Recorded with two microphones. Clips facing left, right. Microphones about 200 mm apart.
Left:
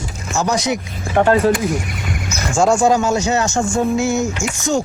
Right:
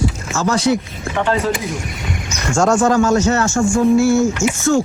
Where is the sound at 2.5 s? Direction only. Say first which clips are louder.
Even; 10° left (ahead or behind).